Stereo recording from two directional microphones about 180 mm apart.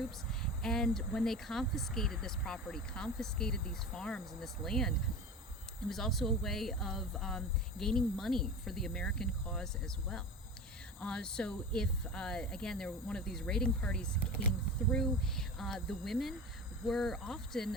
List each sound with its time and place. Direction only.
0.6 s speech: 5° left (ahead or behind)
14.2 s speech: 55° right (ahead or behind)
14.9 s speech: centre (ahead or behind)